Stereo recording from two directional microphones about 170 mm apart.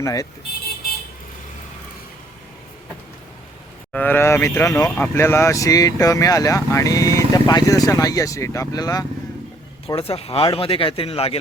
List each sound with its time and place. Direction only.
0.0 s speech: 20° left (ahead or behind)
3.9 s speech: 10° left (ahead or behind)
9.8 s speech: 35° left (ahead or behind)